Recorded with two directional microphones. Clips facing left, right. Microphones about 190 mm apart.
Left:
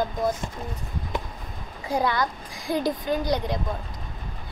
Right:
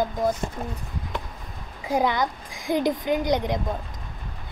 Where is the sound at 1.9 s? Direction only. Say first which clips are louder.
Right 2 dB; 20° right (ahead or behind).